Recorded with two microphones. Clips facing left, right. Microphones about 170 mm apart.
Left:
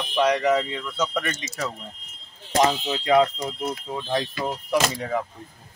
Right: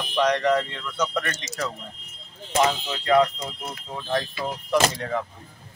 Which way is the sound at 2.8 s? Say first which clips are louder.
Left 1 dB; 15° left (ahead or behind).